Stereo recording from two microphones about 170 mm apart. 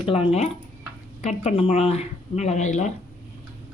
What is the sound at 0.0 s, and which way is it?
Speech, 35° left (ahead or behind).